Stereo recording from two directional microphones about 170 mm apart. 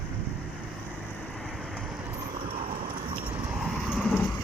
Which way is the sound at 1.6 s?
5° right (ahead or behind).